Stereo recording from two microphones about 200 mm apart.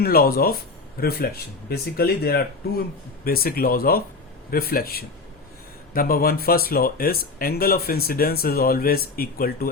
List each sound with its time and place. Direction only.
0.0 s speech: 50° left (ahead or behind)